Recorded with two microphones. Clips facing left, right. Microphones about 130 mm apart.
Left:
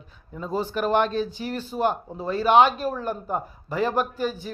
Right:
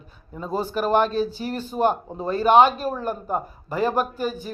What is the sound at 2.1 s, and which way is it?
Speech, 45° right (ahead or behind).